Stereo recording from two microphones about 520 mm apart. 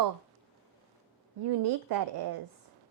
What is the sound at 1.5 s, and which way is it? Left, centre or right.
Speech, right.